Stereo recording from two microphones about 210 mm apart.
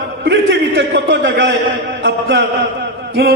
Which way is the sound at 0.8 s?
55° right (ahead or behind).